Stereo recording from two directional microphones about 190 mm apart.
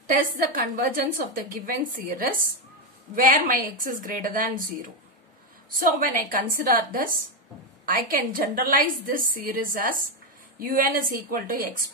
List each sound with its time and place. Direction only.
0.0 s a woman's voice: 50° right (ahead or behind)
5.8 s a woman's voice: 50° right (ahead or behind)